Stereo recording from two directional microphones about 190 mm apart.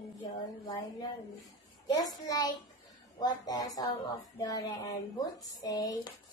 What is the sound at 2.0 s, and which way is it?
Speech, 20° left (ahead or behind).